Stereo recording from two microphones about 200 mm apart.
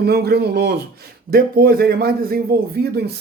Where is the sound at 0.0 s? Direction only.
55° right (ahead or behind).